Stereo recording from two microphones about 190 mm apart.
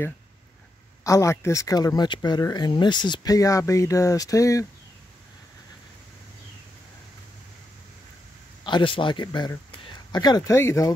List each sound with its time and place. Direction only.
1.0 s speech: 15° left (ahead or behind)
8.6 s speech: 25° left (ahead or behind)